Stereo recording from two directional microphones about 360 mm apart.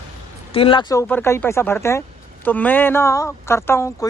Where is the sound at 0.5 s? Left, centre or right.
Centre.